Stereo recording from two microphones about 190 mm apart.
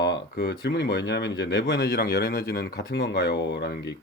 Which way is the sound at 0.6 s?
65° left (ahead or behind).